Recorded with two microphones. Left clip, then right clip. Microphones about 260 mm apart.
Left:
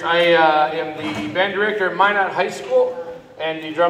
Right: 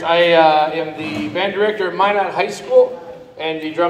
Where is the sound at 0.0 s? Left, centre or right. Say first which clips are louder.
Right 3 dB; right.